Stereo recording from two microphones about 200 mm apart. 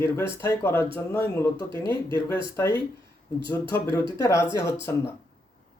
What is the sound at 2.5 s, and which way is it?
Speech, 15° left (ahead or behind).